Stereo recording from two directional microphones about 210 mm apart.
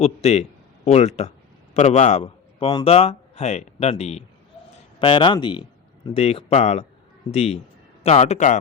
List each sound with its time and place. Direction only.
0.0 s a man's voice: 30° left (ahead or behind)